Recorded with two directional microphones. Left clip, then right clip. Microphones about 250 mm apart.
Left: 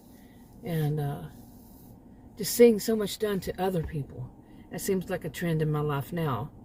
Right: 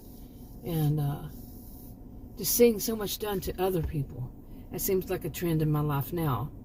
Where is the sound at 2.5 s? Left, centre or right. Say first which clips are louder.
Left 3 dB; left.